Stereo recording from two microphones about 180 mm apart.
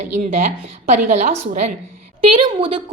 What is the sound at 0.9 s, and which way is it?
A woman's voice, 40° right (ahead or behind).